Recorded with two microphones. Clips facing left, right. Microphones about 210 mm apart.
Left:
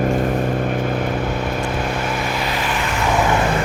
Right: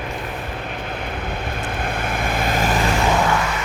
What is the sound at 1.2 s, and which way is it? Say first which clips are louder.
Vehicle: left 6 dB; 55° right (ahead or behind).